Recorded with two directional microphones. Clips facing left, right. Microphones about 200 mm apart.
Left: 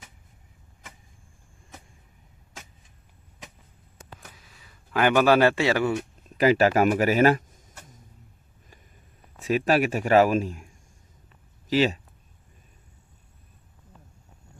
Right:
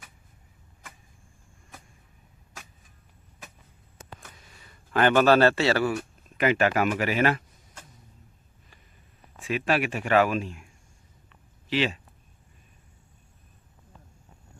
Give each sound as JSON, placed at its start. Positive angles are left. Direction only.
{"t": 4.3, "sound": "a man's voice", "side_deg": 0}
{"t": 6.3, "sound": "speech", "side_deg": 35}
{"t": 9.4, "sound": "speech", "side_deg": 40}
{"t": 11.7, "sound": "speech", "side_deg": 40}